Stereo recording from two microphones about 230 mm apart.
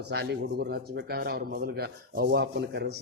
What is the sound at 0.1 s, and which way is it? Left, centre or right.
A man's voice, right.